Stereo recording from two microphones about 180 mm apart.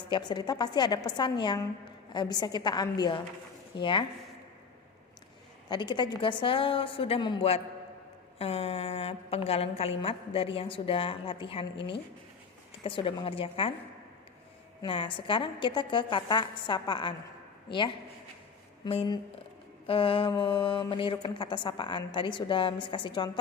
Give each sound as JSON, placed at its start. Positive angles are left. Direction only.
{"t": 0.1, "sound": "speech", "side_deg": 25}
{"t": 5.6, "sound": "a woman's voice", "side_deg": 25}
{"t": 12.8, "sound": "a woman's voice", "side_deg": 30}
{"t": 14.8, "sound": "speech", "side_deg": 25}